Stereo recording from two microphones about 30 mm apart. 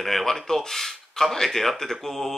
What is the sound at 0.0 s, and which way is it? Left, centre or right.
Speech, centre.